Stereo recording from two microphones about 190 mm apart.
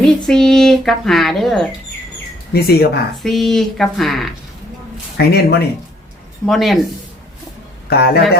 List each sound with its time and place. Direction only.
0.3 s speech: 5° left (ahead or behind)
2.5 s speech: 55° left (ahead or behind)
3.2 s speech: centre (ahead or behind)
5.1 s speech: 60° left (ahead or behind)
6.4 s speech: centre (ahead or behind)
7.9 s speech: 55° left (ahead or behind)